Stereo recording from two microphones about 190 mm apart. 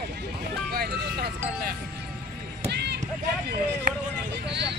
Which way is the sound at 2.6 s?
60° right (ahead or behind).